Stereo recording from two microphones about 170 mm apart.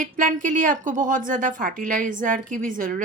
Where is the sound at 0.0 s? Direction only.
50° right (ahead or behind).